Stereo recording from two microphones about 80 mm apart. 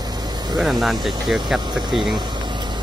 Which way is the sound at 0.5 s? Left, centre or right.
Centre.